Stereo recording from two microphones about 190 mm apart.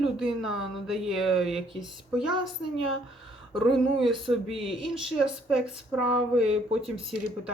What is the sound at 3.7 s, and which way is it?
Speech, centre (ahead or behind).